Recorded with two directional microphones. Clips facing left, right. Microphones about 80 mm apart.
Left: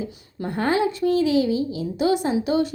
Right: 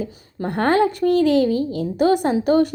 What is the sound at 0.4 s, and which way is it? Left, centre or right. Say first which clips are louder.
A woman's voice: right 4 dB; right.